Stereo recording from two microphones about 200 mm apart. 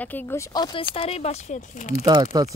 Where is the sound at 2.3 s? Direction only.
20° right (ahead or behind).